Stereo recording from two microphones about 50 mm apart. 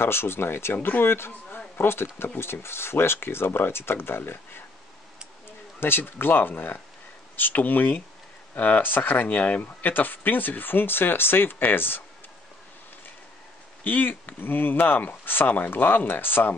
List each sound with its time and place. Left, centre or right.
0.0 s speech: left
5.8 s speech: left
13.8 s speech: left